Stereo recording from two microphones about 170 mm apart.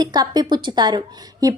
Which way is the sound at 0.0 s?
25° right (ahead or behind).